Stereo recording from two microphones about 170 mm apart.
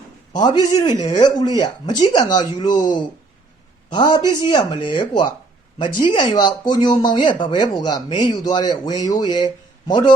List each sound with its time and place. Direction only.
0.3 s speech: 25° left (ahead or behind)